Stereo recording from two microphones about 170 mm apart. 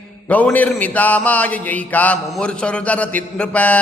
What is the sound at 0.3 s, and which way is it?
Mantra, 10° left (ahead or behind).